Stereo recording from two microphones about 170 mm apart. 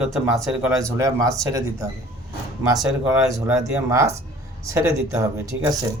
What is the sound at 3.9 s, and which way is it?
A man's voice, 15° right (ahead or behind).